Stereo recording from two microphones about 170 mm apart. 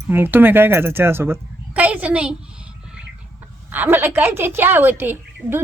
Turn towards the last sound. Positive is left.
turn(degrees=-10)  # may be behind; listen again after turning